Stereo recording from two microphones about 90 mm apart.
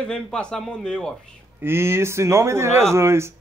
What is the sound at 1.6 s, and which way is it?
Speech, 25° right (ahead or behind).